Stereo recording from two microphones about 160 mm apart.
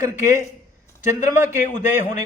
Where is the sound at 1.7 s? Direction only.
50° left (ahead or behind).